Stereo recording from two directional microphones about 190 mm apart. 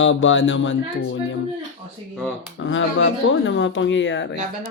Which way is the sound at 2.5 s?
85° left.